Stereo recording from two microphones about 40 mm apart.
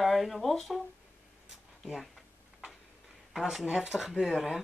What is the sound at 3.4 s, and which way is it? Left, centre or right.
Speech, centre.